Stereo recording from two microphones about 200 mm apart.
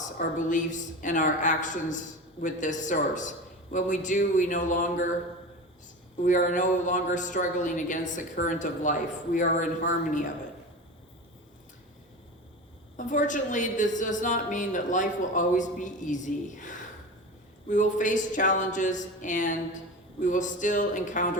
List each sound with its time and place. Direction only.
0.2 s speech: 40° left (ahead or behind)
6.2 s speech: 40° left (ahead or behind)
13.0 s speech: 40° left (ahead or behind)